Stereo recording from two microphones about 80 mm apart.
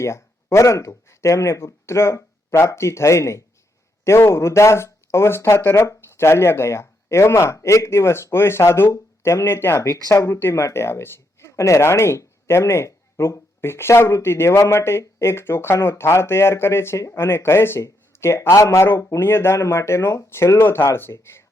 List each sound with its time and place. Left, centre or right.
0.0 s speech: left
10.1 s speech: left